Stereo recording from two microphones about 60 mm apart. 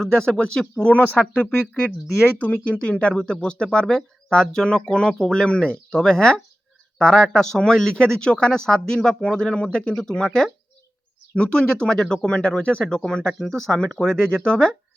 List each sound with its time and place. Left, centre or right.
0.0 s speech: centre
2.4 s speech: left